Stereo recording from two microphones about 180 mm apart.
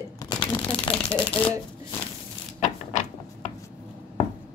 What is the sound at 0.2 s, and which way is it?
Crumpling, 20° left (ahead or behind).